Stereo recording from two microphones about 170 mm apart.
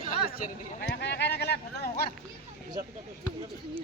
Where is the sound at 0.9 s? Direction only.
90° left; by 2.1 s 70° left (ahead or behind).